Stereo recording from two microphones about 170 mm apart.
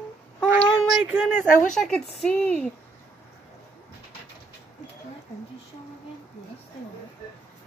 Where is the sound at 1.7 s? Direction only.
5° left (ahead or behind).